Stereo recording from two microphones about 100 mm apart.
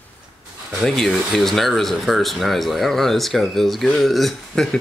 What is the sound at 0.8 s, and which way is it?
Speech, 5° left (ahead or behind).